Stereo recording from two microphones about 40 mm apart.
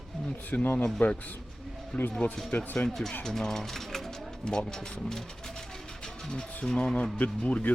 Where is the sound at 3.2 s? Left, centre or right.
Centre.